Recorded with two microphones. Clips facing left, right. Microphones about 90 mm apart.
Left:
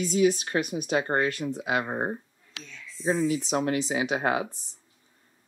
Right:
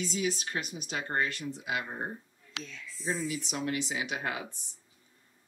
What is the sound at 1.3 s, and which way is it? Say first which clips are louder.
Speech: left 7 dB; 50° left (ahead or behind).